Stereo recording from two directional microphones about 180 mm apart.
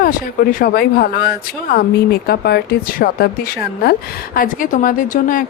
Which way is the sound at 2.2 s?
60° left (ahead or behind).